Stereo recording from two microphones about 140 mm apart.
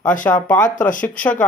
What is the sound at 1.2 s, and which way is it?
Speech, 10° left (ahead or behind).